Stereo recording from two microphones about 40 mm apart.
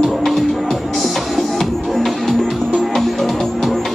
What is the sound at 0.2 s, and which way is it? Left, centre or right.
Music, centre.